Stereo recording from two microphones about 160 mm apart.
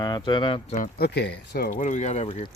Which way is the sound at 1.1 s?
90° left.